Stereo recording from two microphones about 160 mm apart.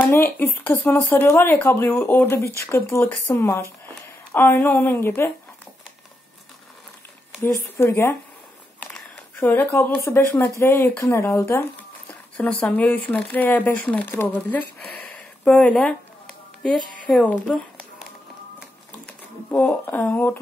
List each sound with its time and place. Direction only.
0.0 s speech: 15° left (ahead or behind)
7.8 s speech: 15° left (ahead or behind)
8.9 s a sound: 10° left (ahead or behind)
10.1 s a woman's voice: 10° left (ahead or behind)
19.0 s speech: 10° left (ahead or behind)